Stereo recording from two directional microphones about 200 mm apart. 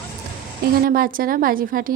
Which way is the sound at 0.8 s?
45° right (ahead or behind).